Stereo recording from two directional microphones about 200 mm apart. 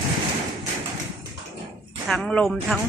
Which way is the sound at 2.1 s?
Centre (ahead or behind).